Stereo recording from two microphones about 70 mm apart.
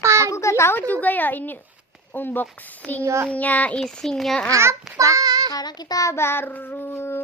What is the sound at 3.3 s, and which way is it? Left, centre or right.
Speech, left.